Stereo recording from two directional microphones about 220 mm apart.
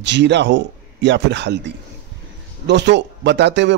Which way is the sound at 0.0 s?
50° right (ahead or behind).